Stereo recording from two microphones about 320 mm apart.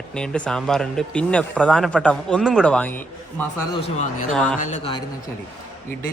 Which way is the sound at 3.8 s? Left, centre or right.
Left.